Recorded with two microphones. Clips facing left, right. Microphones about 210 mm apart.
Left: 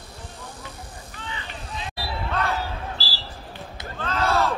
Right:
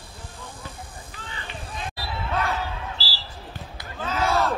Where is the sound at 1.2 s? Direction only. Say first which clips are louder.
Left 2 dB; 45° right (ahead or behind).